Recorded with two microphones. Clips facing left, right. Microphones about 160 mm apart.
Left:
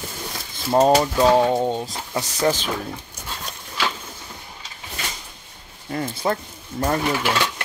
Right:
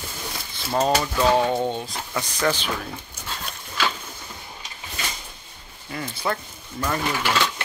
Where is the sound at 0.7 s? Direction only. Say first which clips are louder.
Left 6 dB; 35° left (ahead or behind).